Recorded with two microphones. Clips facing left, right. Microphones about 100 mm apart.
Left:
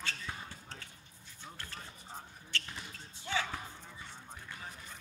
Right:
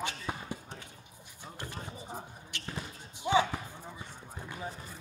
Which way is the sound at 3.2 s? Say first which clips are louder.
Right 9 dB; 20° right (ahead or behind).